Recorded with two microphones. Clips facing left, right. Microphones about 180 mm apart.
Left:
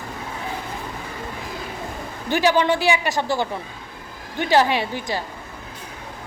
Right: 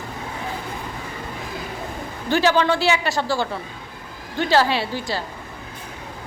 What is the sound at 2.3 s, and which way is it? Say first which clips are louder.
A woman's voice: even; 15° left (ahead or behind).